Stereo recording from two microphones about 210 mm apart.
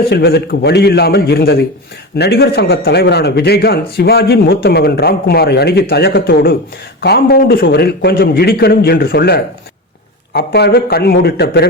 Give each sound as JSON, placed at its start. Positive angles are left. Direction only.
{"t": 0.1, "sound": "a man's voice", "side_deg": 50}